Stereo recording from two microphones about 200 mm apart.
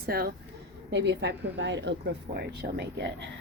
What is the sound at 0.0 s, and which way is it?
Speech, 50° right (ahead or behind).